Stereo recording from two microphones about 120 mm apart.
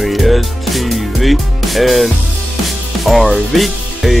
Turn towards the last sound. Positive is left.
turn(degrees=0)  # may be behind; listen again after turning